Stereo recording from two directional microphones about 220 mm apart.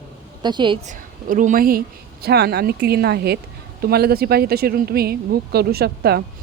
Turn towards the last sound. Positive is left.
turn(degrees=-45)  # may be behind; listen again after turning